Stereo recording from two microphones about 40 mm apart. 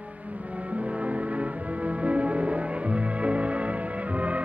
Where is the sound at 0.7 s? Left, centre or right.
Right.